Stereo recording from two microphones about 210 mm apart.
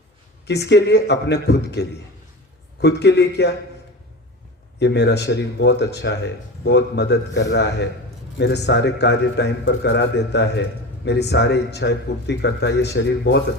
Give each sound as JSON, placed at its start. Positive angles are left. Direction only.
{"t": 0.4, "sound": "a man's voice", "side_deg": 55}
{"t": 4.8, "sound": "a man's voice", "side_deg": 55}